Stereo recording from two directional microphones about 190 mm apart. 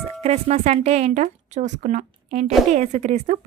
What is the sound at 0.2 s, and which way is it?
Speech, 35° right (ahead or behind).